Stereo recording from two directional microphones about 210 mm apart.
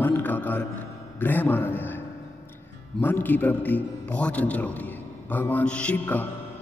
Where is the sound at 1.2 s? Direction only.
10° left (ahead or behind).